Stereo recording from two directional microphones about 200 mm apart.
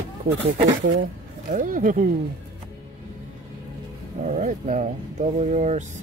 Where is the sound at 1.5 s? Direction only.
40° right (ahead or behind).